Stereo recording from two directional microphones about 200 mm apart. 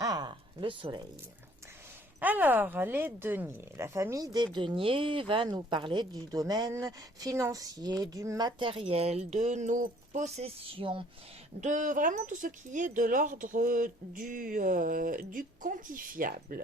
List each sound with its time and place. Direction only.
0.0 s a sound: 20° right (ahead or behind)
2.2 s speech: 10° right (ahead or behind); by 11.0 s 25° right (ahead or behind)
11.6 s speech: 40° right (ahead or behind)